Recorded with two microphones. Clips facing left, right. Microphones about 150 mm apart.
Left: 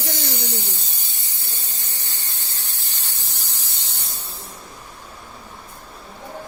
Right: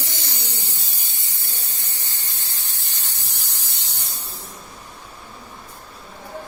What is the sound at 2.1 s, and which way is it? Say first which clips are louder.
Steam: even; 15° right (ahead or behind).